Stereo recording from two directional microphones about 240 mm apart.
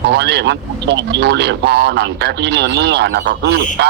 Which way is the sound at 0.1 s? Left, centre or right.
Right.